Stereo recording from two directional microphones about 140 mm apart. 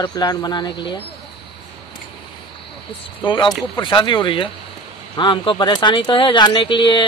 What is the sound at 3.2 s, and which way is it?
Speech, 35° left (ahead or behind).